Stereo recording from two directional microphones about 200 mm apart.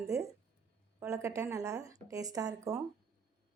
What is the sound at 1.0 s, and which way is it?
A woman's voice, 15° right (ahead or behind).